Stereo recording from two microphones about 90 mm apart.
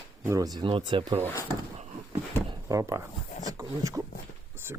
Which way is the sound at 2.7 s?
40° right (ahead or behind).